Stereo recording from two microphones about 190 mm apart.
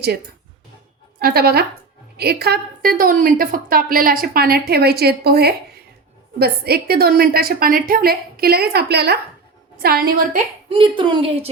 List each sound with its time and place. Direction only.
1.2 s a woman's voice: 55° right (ahead or behind)
10.7 s a woman's voice: 30° right (ahead or behind)